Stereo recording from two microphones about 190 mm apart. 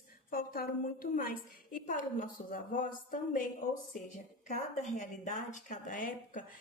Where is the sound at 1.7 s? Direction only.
45° left (ahead or behind).